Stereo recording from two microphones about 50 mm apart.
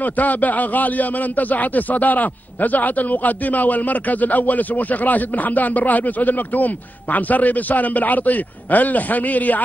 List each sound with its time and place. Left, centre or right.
0.0 s a man's voice: left